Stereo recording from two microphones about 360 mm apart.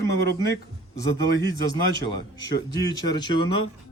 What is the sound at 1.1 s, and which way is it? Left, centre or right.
A man's voice, left.